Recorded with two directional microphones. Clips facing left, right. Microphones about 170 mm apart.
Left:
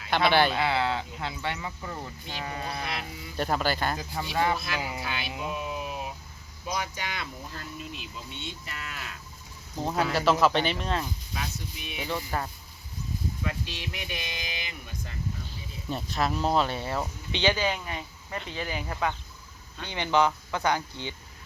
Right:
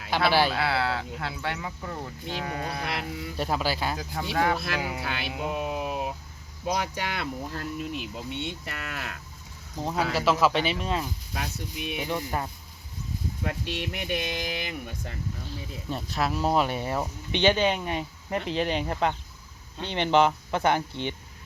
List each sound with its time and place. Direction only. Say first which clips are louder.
0.1 s speech: even; 5° right (ahead or behind)
2.8 s speech: right 4 dB; 60° right (ahead or behind)
3.3 s speech: left 1 dB; 5° right (ahead or behind)
4.5 s speech: right 2 dB; 60° right (ahead or behind)
5.4 s a sound: right 6 dB; 60° right (ahead or behind)
6.7 s speech: right 4 dB; 60° right (ahead or behind)
9.8 s speech: even; centre (ahead or behind)
11.3 s speech: right 4 dB; 55° right (ahead or behind)
12.0 s speech: left 1 dB; 15° right (ahead or behind)
13.4 s speech: right 3 dB; 60° right (ahead or behind)
15.4 s speech: right 2 dB; centre (ahead or behind); by 21.2 s 20° right (ahead or behind)